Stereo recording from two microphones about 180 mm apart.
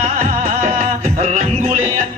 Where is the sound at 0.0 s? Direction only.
50° right (ahead or behind).